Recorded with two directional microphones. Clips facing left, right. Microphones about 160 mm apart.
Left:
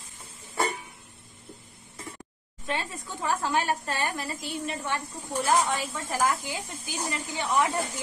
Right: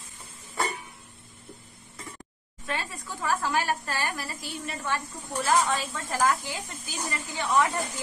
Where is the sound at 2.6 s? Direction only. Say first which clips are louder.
Left 2 dB; 20° left (ahead or behind).